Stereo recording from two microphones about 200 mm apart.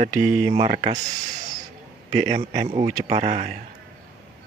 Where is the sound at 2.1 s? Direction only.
35° right (ahead or behind).